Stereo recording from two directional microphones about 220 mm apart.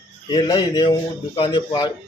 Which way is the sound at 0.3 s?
20° left (ahead or behind).